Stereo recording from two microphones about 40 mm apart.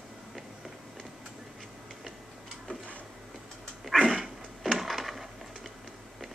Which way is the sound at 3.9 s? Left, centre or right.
Centre.